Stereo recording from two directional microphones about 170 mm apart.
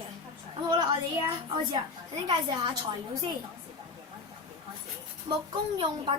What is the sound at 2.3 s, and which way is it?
A child's voice, 30° right (ahead or behind).